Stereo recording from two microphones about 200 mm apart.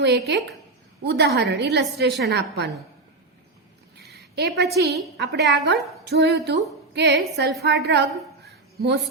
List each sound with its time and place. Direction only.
0.0 s a woman's voice: 55° right (ahead or behind)
3.9 s a sound: 55° right (ahead or behind)
5.1 s a woman's voice: 55° right (ahead or behind)